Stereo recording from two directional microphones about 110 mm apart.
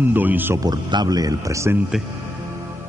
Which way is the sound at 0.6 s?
40° right (ahead or behind).